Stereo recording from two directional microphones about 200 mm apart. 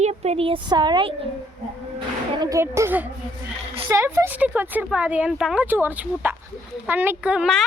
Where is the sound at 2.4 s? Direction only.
15° right (ahead or behind).